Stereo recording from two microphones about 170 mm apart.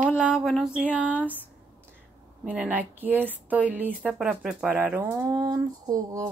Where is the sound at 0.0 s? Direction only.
5° right (ahead or behind).